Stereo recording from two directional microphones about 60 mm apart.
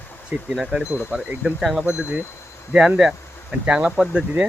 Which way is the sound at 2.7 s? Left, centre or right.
Centre.